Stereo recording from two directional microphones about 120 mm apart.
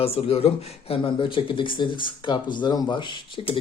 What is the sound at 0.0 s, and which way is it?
A man's voice, 50° left (ahead or behind).